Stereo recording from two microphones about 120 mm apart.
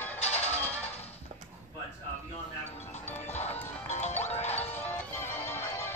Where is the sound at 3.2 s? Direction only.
70° left (ahead or behind).